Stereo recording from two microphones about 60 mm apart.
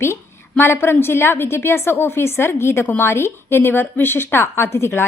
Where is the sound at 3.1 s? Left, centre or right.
Left.